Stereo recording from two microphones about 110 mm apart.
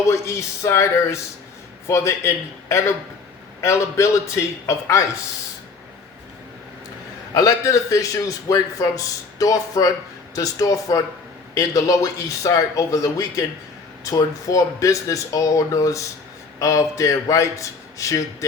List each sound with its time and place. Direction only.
0.1 s speech: 25° left (ahead or behind)
7.3 s a man's voice: 30° left (ahead or behind)